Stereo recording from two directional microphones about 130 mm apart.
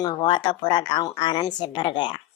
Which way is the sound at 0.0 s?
35° left (ahead or behind).